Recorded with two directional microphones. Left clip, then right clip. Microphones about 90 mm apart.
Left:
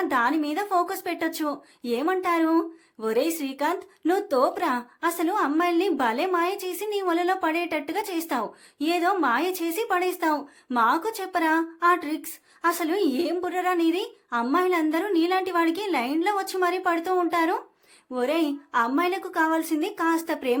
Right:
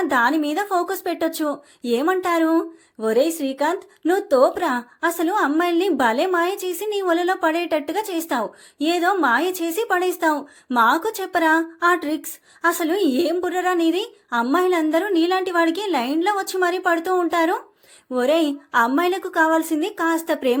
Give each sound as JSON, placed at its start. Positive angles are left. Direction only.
{"t": 0.0, "sound": "a woman's voice", "side_deg": -50}
{"t": 1.8, "sound": "a woman's voice", "side_deg": -55}